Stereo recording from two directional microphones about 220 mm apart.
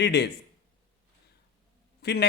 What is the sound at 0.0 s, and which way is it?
Speech, 50° left (ahead or behind).